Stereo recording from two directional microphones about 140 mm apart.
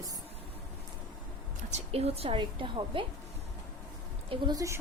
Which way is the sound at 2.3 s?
35° right (ahead or behind).